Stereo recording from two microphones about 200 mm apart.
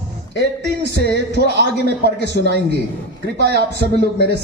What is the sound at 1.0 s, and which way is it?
Speech, 55° right (ahead or behind).